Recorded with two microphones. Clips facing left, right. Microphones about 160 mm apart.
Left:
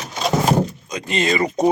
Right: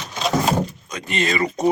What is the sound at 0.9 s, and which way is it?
Speech, 35° left (ahead or behind).